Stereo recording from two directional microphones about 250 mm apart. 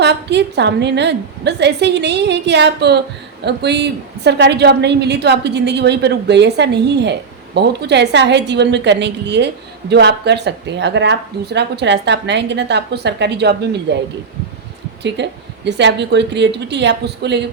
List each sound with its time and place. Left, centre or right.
0.0 s a woman's voice: right